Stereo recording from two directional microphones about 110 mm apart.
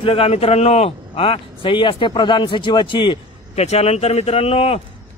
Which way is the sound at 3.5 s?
80° left.